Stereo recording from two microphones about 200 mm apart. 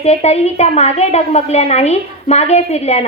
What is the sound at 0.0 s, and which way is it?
A woman's voice, 35° left (ahead or behind).